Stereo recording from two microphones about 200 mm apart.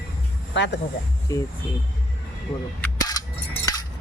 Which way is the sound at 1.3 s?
15° left (ahead or behind).